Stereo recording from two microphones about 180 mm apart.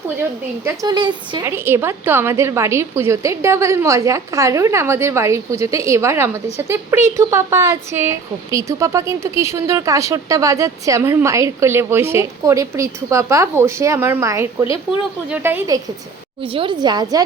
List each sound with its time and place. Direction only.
0.6 s a woman's voice: 20° right (ahead or behind)
1.5 s a woman's voice: 15° right (ahead or behind)
16.4 s a woman's voice: 30° right (ahead or behind)